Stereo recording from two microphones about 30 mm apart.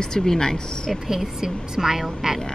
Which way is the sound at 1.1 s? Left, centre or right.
Centre.